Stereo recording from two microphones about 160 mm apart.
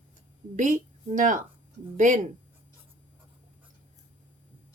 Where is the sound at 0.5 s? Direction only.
55° right (ahead or behind).